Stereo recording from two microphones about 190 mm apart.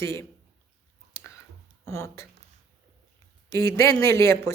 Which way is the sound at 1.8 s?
15° left (ahead or behind).